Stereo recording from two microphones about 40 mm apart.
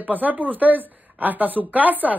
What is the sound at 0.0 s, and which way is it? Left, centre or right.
Speech, right.